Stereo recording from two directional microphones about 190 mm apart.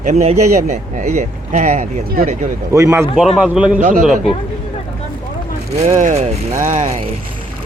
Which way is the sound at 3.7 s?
40° right (ahead or behind).